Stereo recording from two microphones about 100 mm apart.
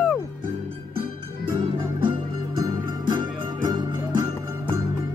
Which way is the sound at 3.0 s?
50° right (ahead or behind).